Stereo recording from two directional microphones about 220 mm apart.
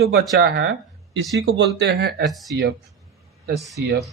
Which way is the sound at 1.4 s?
60° right (ahead or behind).